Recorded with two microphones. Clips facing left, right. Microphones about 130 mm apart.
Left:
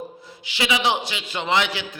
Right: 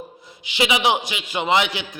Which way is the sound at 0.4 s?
20° right (ahead or behind).